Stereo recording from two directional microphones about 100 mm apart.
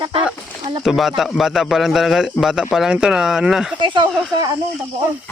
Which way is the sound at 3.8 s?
55° right (ahead or behind).